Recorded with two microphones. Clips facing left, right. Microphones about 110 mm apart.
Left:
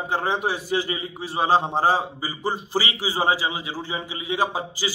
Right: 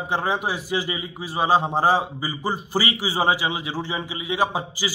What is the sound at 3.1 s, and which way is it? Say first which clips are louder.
Speech: even; 15° right (ahead or behind).